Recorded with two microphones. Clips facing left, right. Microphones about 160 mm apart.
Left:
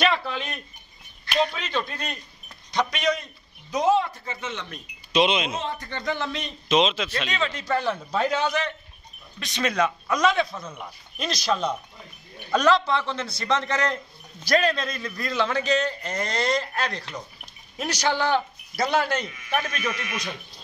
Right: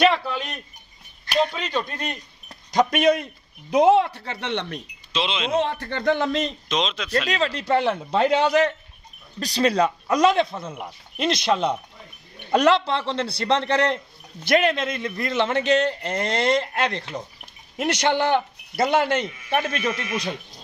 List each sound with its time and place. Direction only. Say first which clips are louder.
0.1 s a sound: right 2 dB; 10° right (ahead or behind)
1.7 s speech: right 2 dB; 15° right (ahead or behind)
2.7 s speech: right 6 dB; 50° right (ahead or behind); by 4.8 s 70° right (ahead or behind)
5.1 s speech: left 5 dB; 15° left (ahead or behind)
5.5 s speech: right 8 dB; 65° right (ahead or behind)
6.7 s speech: left 4 dB; 5° left (ahead or behind)
7.2 s a man's voice: right 4 dB; 35° right (ahead or behind)